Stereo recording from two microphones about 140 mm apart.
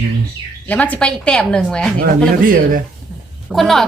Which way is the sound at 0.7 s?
10° left (ahead or behind).